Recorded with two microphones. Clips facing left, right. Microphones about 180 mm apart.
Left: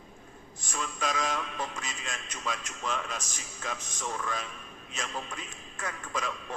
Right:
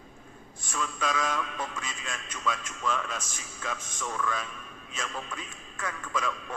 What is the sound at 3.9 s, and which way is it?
Speech, 45° left (ahead or behind).